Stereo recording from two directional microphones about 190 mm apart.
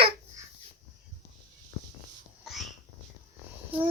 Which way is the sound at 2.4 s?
Centre (ahead or behind).